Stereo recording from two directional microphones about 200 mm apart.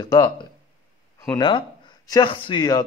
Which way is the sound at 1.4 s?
20° left (ahead or behind).